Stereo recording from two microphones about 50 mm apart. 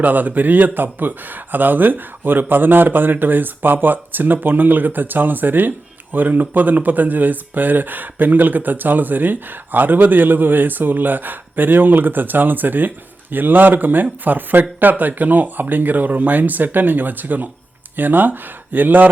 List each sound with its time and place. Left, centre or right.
0.0 s speech: right